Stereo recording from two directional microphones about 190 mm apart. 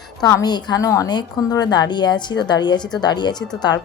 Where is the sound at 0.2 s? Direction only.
20° left (ahead or behind).